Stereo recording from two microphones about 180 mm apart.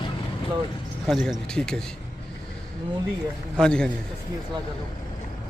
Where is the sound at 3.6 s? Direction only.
5° left (ahead or behind).